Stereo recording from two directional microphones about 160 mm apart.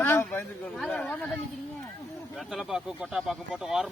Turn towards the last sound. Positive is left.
turn(degrees=0)  # may be behind; listen again after turning